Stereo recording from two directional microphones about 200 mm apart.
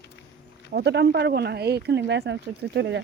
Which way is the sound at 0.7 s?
55° right (ahead or behind).